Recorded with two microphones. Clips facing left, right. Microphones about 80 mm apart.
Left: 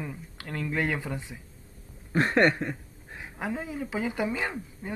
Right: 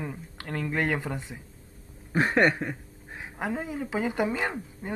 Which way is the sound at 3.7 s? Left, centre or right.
Right.